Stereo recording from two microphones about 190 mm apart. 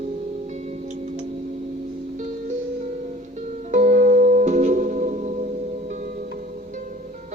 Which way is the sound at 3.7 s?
40° right (ahead or behind).